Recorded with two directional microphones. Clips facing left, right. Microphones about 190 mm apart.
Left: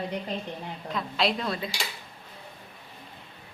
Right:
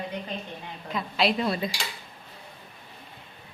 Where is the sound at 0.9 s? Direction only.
5° right (ahead or behind).